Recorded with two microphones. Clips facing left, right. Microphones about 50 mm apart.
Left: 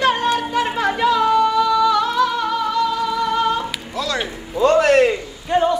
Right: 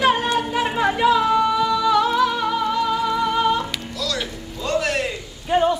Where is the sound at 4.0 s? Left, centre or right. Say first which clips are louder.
Left 4 dB; left.